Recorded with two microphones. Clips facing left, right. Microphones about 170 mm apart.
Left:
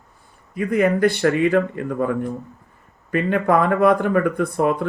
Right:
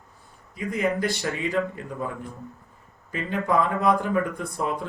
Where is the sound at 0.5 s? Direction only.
60° left (ahead or behind).